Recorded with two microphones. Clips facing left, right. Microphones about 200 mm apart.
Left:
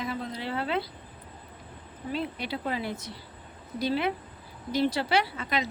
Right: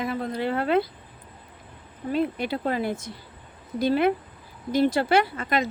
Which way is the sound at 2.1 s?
50° right (ahead or behind).